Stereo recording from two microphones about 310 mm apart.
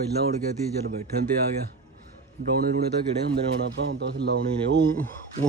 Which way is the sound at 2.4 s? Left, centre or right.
Right.